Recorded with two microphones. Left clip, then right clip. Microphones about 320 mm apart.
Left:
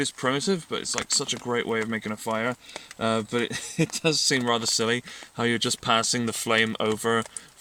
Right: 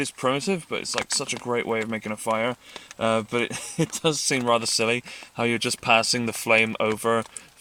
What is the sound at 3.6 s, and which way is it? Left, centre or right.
Speech, right.